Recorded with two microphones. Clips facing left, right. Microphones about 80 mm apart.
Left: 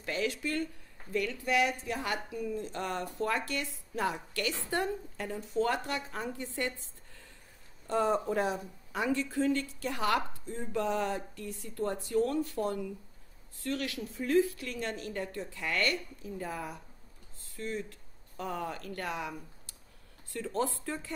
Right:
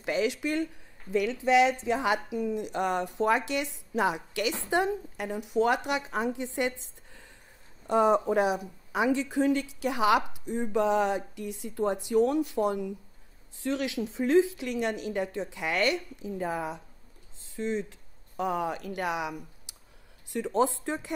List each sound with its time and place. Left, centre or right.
0.0 s a woman's voice: centre
7.8 s a woman's voice: centre
19.7 s a sound: centre
20.2 s a woman's voice: centre